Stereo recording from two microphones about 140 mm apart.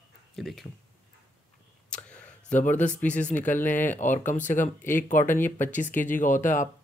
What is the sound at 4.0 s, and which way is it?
Speech, 65° left (ahead or behind).